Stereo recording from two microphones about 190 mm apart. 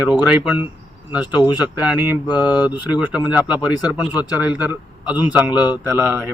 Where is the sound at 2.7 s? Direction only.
5° right (ahead or behind).